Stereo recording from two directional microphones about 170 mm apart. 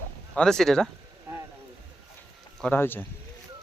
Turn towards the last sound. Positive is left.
turn(degrees=10)  # may be behind; listen again after turning